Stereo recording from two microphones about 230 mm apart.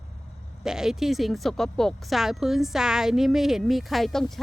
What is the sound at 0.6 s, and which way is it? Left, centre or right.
Speech, centre.